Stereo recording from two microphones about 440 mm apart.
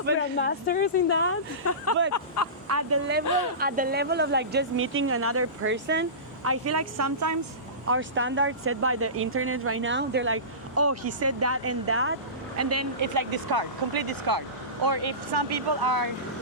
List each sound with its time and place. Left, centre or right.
0.3 s a woman's voice: left
2.6 s speech: right
3.6 s speech: centre; by 7.3 s right
7.9 s speech: right